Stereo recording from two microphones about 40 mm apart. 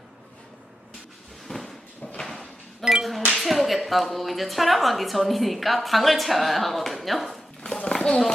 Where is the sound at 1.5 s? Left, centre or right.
Left.